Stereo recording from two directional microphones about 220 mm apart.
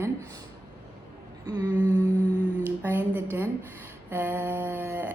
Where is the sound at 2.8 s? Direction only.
10° right (ahead or behind).